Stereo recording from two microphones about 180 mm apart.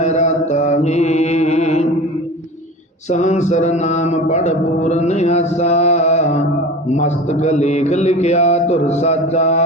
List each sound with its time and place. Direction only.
0.0 s music: 40° left (ahead or behind)
3.1 s mantra: 40° left (ahead or behind)